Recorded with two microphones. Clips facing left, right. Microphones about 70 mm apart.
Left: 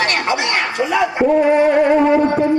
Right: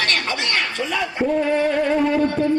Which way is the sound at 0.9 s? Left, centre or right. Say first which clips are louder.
Left 7 dB; left.